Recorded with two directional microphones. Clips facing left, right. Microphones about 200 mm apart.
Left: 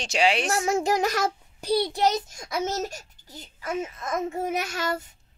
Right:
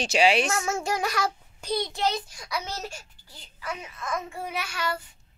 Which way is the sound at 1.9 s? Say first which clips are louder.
Left 4 dB; 40° left (ahead or behind).